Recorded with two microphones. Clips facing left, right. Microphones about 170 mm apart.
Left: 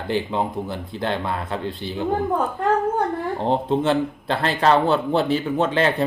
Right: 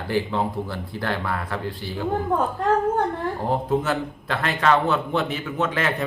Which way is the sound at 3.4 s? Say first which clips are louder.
Left 3 dB; 25° left (ahead or behind).